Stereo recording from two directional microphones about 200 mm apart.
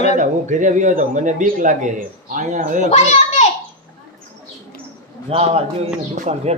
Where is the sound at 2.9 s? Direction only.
35° left (ahead or behind).